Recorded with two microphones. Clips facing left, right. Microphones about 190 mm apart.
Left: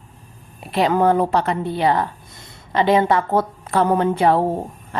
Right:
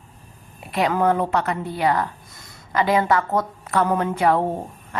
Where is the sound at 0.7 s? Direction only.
30° left (ahead or behind).